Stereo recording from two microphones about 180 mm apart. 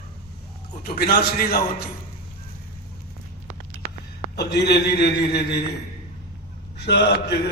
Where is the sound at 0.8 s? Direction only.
60° left (ahead or behind).